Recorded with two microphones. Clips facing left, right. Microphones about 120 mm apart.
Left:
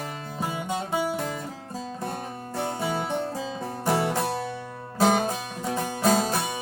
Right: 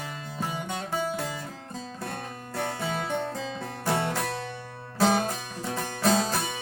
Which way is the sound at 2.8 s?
20° left (ahead or behind).